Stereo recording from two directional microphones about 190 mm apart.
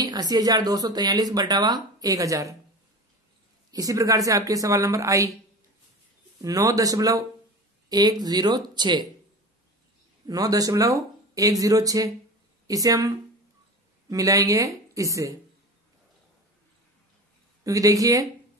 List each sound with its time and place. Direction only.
0.0 s speech: 20° right (ahead or behind)
3.7 s a woman's voice: 15° right (ahead or behind)
6.4 s a woman's voice: 20° right (ahead or behind)
10.2 s a woman's voice: 20° right (ahead or behind)
17.6 s a woman's voice: 20° right (ahead or behind)